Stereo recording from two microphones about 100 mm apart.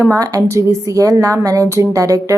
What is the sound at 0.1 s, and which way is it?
A woman's voice, 35° right (ahead or behind).